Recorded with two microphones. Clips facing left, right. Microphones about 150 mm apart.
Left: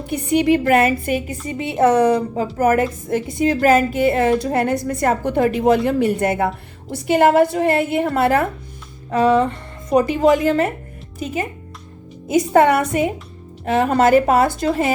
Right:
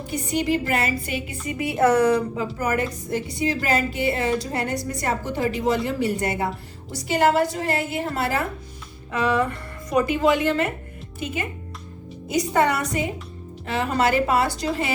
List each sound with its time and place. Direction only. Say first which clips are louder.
0.1 s a woman's voice: left 7 dB; 60° left (ahead or behind)
1.5 s speech: left 3 dB; 25° left (ahead or behind)
2.3 s a woman's voice: left 8 dB; 45° left (ahead or behind)
9.1 s a woman's voice: left 7 dB; 30° left (ahead or behind)
12.3 s a woman's voice: left 7 dB; 50° left (ahead or behind)